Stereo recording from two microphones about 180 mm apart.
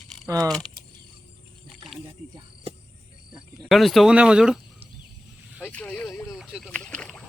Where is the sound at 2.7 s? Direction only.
35° right (ahead or behind).